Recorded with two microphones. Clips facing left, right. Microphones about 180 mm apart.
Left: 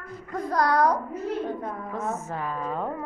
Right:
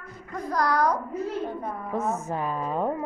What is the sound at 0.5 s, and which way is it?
Speech, 30° left (ahead or behind).